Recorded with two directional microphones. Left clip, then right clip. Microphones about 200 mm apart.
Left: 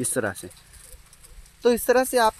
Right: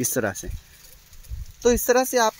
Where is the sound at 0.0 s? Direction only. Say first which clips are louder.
Right 2 dB; 25° right (ahead or behind).